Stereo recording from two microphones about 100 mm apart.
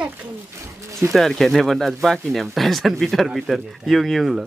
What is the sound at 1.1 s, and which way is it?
Speech, centre (ahead or behind).